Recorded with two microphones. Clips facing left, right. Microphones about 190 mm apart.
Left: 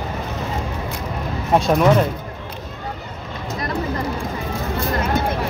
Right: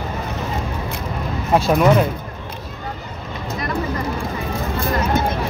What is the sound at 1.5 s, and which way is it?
Speech, centre (ahead or behind).